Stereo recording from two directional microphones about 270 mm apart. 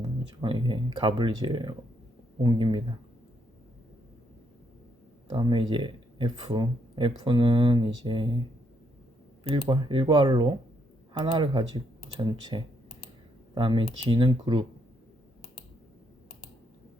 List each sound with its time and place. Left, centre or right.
0.4 s speech: centre
5.3 s speech: centre
9.4 s speech: centre